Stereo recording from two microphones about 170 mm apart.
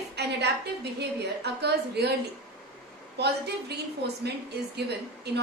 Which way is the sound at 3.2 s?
75° right (ahead or behind).